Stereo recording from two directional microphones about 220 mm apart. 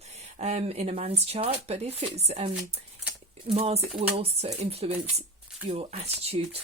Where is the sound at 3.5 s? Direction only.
25° right (ahead or behind).